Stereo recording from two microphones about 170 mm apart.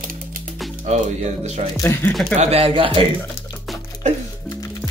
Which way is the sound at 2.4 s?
35° right (ahead or behind).